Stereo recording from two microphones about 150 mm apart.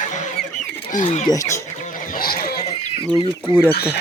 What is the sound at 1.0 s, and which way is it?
Speech, 60° left (ahead or behind).